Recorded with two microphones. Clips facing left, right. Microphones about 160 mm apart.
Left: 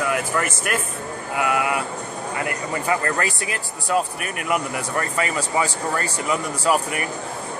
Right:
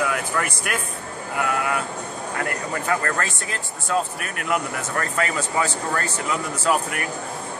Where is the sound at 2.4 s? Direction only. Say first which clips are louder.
Left 1 dB; 5° left (ahead or behind).